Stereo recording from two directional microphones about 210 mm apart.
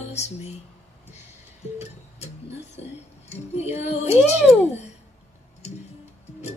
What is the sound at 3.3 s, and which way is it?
Music, 30° left (ahead or behind).